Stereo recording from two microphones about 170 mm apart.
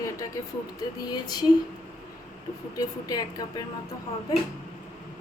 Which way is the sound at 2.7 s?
20° left (ahead or behind).